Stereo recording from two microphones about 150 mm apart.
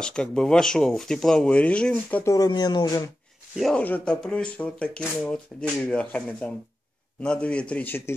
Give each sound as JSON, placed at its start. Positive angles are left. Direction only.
{"t": 0.0, "sound": "speech", "side_deg": 5}
{"t": 2.3, "sound": "speech", "side_deg": 25}
{"t": 3.5, "sound": "speech", "side_deg": 0}